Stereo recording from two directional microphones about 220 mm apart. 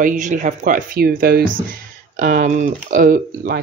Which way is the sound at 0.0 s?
35° right (ahead or behind).